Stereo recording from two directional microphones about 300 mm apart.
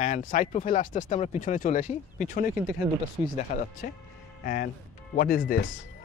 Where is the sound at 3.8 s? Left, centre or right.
Left.